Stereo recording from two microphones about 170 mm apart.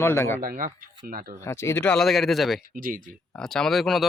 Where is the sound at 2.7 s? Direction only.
55° right (ahead or behind).